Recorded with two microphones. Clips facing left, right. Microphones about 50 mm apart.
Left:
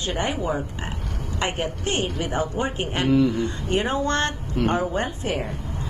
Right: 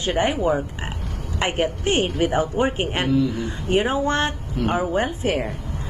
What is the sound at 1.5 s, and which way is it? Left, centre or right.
Speech, right.